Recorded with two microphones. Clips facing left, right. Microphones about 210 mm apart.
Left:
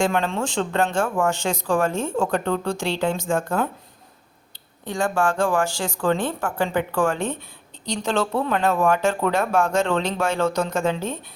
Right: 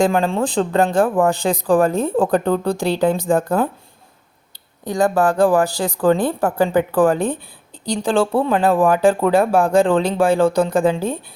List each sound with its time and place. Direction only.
0.0 s speech: 35° right (ahead or behind)
4.9 s speech: 35° right (ahead or behind)